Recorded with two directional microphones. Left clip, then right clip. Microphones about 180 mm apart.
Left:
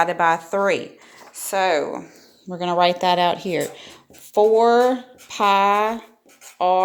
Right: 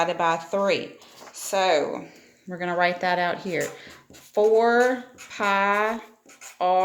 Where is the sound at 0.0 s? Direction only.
30° left (ahead or behind).